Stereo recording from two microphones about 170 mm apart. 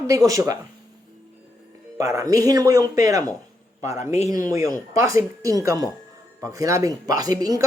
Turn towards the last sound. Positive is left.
turn(degrees=-20)  # may be behind; listen again after turning